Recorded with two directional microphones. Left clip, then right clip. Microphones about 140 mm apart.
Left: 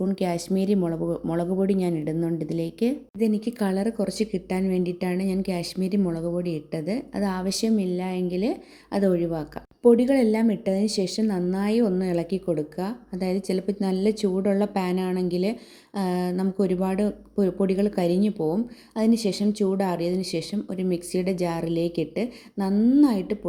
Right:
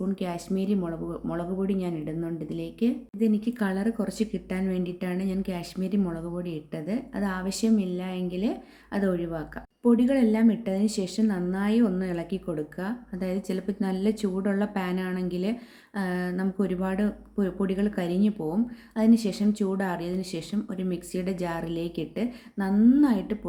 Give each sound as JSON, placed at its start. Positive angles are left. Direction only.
{"t": 0.0, "sound": "speech", "side_deg": 40}